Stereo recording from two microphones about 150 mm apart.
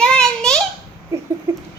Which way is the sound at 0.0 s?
5° left (ahead or behind).